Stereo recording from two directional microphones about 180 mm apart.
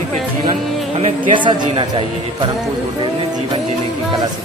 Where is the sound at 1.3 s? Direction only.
25° right (ahead or behind).